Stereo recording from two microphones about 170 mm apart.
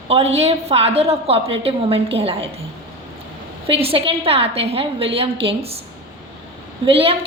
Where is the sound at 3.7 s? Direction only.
35° right (ahead or behind).